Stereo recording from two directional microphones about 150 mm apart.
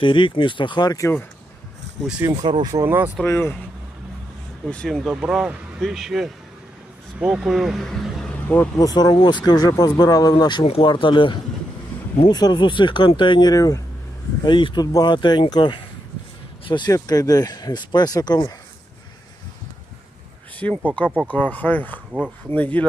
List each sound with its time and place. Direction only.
0.0 s speech: 35° left (ahead or behind)
2.0 s speech: 10° right (ahead or behind)
2.3 s speech: 30° right (ahead or behind)
2.8 s speech: 15° right (ahead or behind)
3.2 s speech: 15° left (ahead or behind)
4.6 s speech: 5° left (ahead or behind)
8.4 s speech: 10° left (ahead or behind)
8.9 s speech: 25° left (ahead or behind)
20.6 s speech: 10° left (ahead or behind)